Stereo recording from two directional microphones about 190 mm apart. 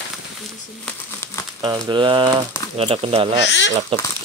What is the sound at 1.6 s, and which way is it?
Speech, 25° right (ahead or behind).